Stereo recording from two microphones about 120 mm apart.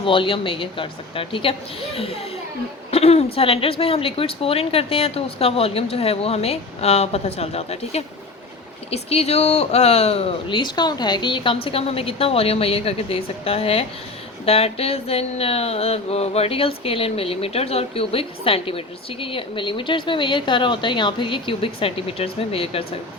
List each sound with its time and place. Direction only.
0.0 s speech: 45° left (ahead or behind)
2.9 s a woman's voice: 60° left (ahead or behind)
10.6 s a woman's voice: 35° left (ahead or behind); by 22.9 s 55° left (ahead or behind)